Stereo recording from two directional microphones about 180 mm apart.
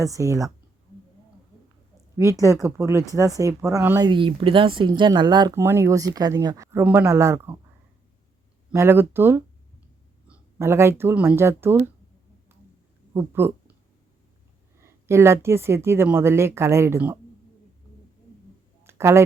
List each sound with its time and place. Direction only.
0.0 s speech: 20° right (ahead or behind)
2.4 s a woman's voice: 15° right (ahead or behind)
4.1 s speech: 30° right (ahead or behind)
8.7 s a woman's voice: 15° right (ahead or behind)
13.1 s a woman's voice: 10° right (ahead or behind)
14.8 s a woman's voice: 15° right (ahead or behind)
18.8 s a sound: 15° right (ahead or behind)